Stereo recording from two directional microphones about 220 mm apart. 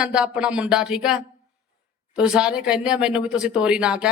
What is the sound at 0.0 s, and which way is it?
Speech, 5° right (ahead or behind).